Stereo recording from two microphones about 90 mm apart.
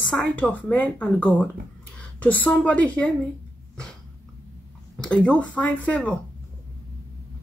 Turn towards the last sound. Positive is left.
turn(degrees=15)  # may be behind; listen again after turning